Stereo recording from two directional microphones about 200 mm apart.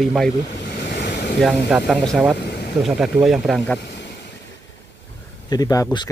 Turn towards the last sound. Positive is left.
turn(degrees=20)  # may be behind; listen again after turning